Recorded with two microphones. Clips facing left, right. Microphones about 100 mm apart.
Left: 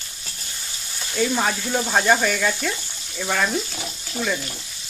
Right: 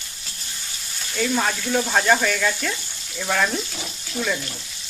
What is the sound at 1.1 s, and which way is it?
Speech, 10° left (ahead or behind).